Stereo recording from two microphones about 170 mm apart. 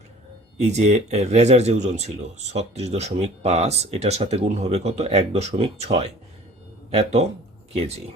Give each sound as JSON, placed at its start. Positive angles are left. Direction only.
{"t": 0.6, "sound": "speech", "side_deg": -40}